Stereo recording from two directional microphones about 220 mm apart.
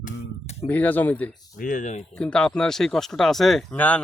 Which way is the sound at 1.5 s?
40° left (ahead or behind).